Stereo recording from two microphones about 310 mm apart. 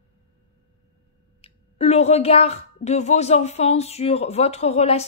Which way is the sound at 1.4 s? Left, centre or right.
Centre.